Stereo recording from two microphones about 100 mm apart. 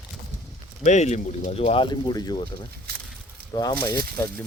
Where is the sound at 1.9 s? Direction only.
45° left (ahead or behind).